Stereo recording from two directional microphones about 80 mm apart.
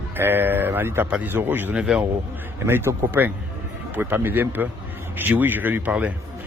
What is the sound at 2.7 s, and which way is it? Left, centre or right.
Speech, right.